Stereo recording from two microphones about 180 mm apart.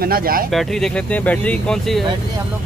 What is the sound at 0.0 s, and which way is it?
Speech, 55° right (ahead or behind).